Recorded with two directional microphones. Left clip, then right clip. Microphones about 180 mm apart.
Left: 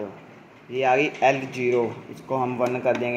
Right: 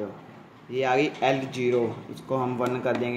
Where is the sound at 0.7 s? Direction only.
15° right (ahead or behind).